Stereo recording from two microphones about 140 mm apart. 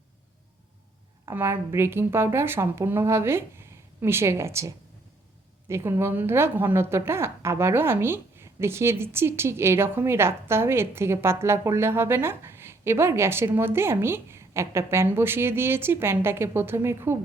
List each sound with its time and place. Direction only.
1.2 s a woman's voice: 20° right (ahead or behind)